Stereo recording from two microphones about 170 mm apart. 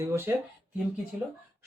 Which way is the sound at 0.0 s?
15° right (ahead or behind).